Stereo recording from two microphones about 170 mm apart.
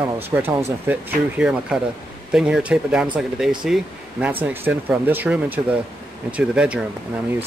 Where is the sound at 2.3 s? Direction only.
5° right (ahead or behind).